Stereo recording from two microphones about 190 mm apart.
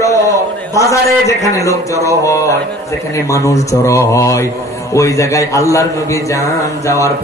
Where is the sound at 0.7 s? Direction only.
15° left (ahead or behind).